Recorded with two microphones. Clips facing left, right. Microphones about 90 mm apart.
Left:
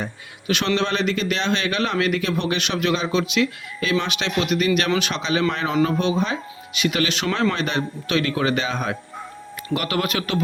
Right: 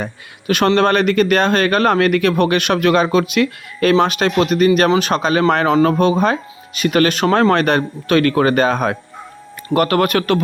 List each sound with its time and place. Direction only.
0.0 s speech: 55° right (ahead or behind)
7.5 s speech: 60° right (ahead or behind)